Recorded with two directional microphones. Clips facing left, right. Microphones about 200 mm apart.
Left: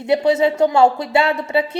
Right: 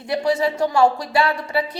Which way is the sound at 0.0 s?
25° left (ahead or behind).